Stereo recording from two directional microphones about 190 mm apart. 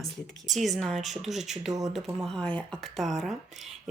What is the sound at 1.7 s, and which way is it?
Speech, 20° right (ahead or behind).